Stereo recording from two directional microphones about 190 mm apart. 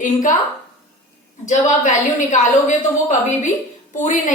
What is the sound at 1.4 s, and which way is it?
Speech, 40° left (ahead or behind).